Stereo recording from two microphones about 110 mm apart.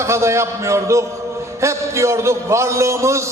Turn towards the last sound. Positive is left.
turn(degrees=-25)  # may be behind; listen again after turning